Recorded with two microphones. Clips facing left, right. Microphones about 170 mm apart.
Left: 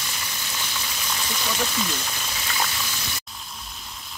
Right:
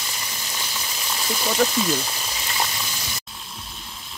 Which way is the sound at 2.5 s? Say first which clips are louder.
Right 1 dB; 20° right (ahead or behind).